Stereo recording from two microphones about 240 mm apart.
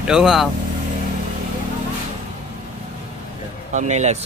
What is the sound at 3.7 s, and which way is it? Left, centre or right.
Speech, right.